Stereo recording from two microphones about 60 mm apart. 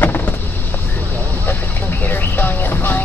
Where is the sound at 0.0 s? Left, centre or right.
Left.